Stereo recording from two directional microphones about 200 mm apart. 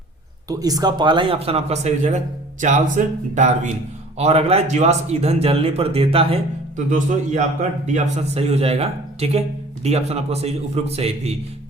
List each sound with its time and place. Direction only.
0.4 s speech: 20° right (ahead or behind)